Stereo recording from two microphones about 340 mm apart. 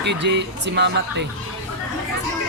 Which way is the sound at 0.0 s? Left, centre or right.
Right.